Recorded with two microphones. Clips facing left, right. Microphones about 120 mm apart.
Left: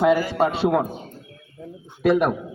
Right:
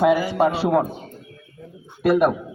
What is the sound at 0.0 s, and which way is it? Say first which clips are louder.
Speech: right 1 dB; 15° right (ahead or behind).